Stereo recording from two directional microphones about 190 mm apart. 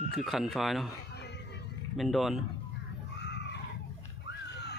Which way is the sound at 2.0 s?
Centre (ahead or behind).